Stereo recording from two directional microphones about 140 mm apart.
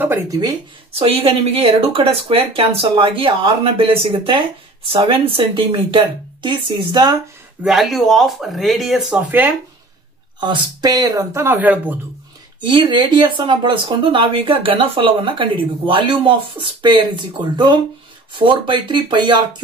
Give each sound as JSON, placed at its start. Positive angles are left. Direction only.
{"t": 0.9, "sound": "speech", "side_deg": -40}
{"t": 7.6, "sound": "speech", "side_deg": 0}
{"t": 10.4, "sound": "speech", "side_deg": -30}
{"t": 12.5, "sound": "speech", "side_deg": -35}